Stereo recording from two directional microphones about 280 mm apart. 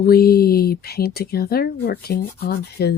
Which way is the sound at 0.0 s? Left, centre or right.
Left.